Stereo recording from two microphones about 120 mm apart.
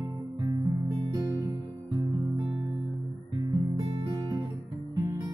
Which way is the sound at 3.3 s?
35° right (ahead or behind).